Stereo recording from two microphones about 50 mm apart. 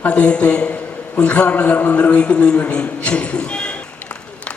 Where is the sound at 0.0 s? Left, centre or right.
Left.